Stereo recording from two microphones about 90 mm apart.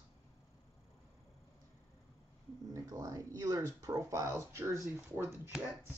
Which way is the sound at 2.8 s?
40° right (ahead or behind).